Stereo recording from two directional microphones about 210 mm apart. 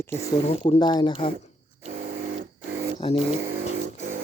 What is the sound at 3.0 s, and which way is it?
Vehicle, 25° left (ahead or behind).